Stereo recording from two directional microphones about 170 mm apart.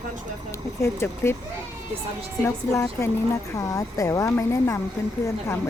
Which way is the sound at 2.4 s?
15° left (ahead or behind).